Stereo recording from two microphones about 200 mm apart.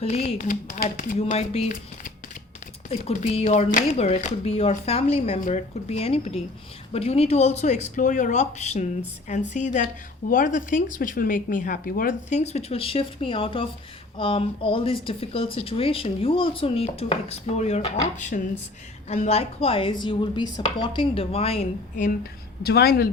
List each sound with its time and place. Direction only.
0.0 s speech: 30° left (ahead or behind)
2.9 s speech: 35° left (ahead or behind)
22.6 s speech: 50° left (ahead or behind)